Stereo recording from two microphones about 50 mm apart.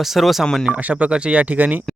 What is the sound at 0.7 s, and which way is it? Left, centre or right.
Speech, right.